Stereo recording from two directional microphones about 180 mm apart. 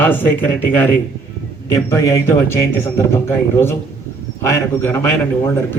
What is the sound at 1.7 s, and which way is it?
A man's voice, 15° left (ahead or behind).